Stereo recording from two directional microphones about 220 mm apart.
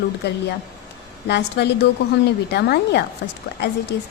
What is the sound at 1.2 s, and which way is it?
Speech, 50° left (ahead or behind).